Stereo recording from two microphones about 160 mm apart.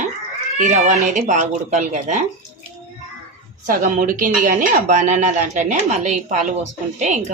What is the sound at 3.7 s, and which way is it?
Speech, 55° right (ahead or behind).